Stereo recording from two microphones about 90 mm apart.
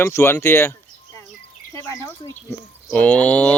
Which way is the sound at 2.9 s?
15° left (ahead or behind).